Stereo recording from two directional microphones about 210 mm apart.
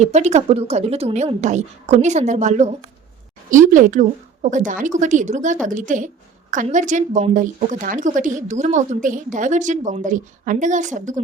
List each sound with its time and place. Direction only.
0.0 s a woman's voice: 30° right (ahead or behind)